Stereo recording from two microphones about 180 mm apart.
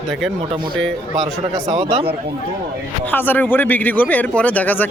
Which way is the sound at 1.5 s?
25° right (ahead or behind).